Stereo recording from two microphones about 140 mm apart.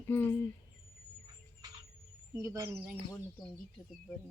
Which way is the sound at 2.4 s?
20° right (ahead or behind).